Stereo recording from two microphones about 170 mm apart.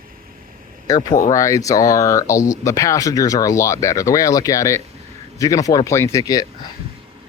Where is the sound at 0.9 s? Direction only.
20° left (ahead or behind).